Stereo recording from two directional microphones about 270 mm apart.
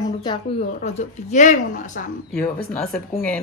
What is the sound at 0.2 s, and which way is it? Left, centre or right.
Speech, centre.